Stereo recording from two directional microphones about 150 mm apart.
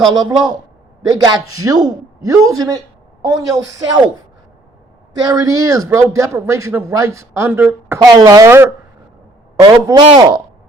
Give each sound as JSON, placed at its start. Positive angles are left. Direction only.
{"t": 0.1, "sound": "speech", "side_deg": -25}
{"t": 5.2, "sound": "speech", "side_deg": -25}
{"t": 7.9, "sound": "speech", "side_deg": -25}